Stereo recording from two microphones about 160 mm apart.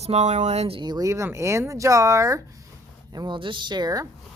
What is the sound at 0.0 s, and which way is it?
Speech, 45° right (ahead or behind).